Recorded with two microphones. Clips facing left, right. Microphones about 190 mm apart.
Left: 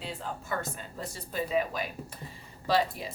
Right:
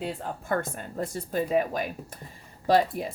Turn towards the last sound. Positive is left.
turn(degrees=-50)  # may be behind; listen again after turning